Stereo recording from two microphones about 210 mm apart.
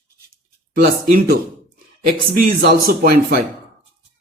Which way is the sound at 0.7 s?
45° right (ahead or behind).